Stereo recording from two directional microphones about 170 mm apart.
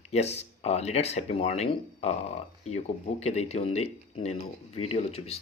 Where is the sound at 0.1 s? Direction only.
40° left (ahead or behind).